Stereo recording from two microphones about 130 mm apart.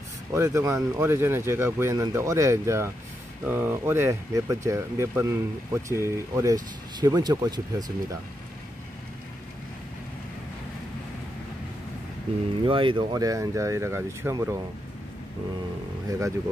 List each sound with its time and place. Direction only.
0.3 s speech: 25° right (ahead or behind)
12.6 s speech: 40° right (ahead or behind); by 14.6 s 20° right (ahead or behind)
16.1 s speech: 25° right (ahead or behind)